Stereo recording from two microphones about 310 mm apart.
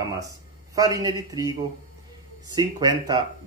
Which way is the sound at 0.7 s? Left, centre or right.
Centre.